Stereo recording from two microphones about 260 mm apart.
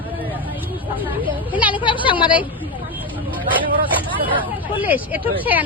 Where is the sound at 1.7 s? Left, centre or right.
Centre.